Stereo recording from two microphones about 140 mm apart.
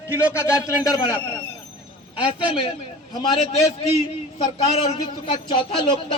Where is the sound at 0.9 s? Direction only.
25° left (ahead or behind).